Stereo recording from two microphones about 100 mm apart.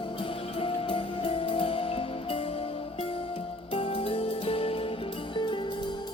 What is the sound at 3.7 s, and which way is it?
Music, 65° left (ahead or behind).